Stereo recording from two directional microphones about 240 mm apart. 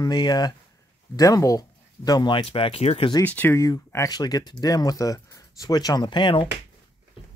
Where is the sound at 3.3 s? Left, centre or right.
Centre.